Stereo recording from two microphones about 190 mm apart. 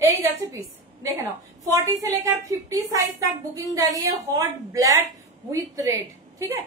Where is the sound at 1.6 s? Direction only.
15° right (ahead or behind).